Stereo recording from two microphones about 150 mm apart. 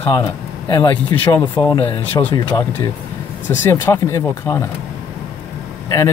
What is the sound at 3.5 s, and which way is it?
A man's voice, 15° left (ahead or behind).